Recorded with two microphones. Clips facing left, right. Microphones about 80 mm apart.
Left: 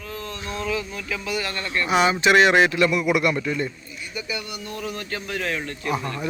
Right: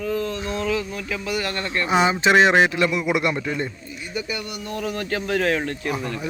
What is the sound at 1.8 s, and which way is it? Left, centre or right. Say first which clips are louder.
Speech: even; right.